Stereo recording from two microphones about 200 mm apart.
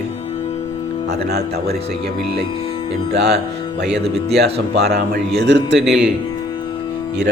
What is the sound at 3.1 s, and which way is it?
Speech, 55° right (ahead or behind).